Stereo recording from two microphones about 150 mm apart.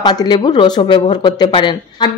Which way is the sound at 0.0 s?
30° left (ahead or behind).